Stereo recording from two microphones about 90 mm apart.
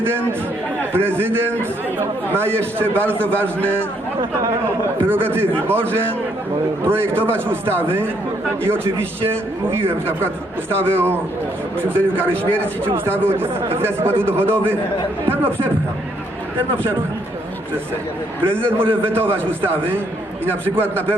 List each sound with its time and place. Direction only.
0.0 s speech: 25° right (ahead or behind)
5.0 s speech: 25° right (ahead or behind)
6.8 s speech: 25° right (ahead or behind)
18.4 s speech: 25° right (ahead or behind)
20.7 s speech: 25° right (ahead or behind)